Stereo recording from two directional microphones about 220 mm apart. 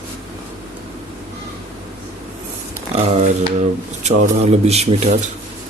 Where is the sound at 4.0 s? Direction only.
30° right (ahead or behind).